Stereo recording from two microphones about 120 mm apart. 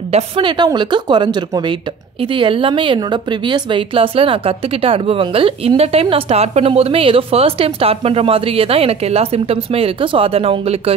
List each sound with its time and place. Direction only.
0.1 s a woman's voice: 45° right (ahead or behind)